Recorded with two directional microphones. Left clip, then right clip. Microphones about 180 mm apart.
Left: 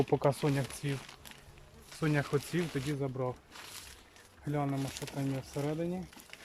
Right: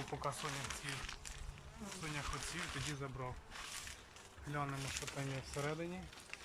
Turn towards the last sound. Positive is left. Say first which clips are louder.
# left 7 dB
turn(degrees=35)  # may be behind; listen again after turning